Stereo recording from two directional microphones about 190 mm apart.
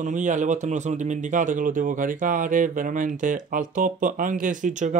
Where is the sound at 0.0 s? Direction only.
40° right (ahead or behind).